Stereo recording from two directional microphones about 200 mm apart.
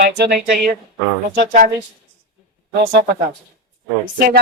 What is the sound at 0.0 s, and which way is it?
Speech, 50° right (ahead or behind).